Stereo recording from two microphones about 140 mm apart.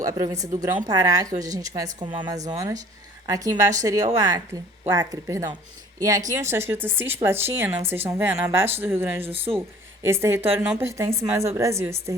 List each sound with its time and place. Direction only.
0.0 s a woman's voice: 25° right (ahead or behind)
9.2 s speech: 45° right (ahead or behind)
9.6 s a woman's voice: 20° right (ahead or behind)